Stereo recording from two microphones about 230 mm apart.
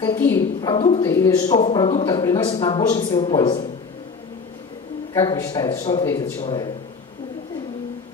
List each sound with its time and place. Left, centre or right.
0.0 s a man's voice: centre
5.1 s a man's voice: centre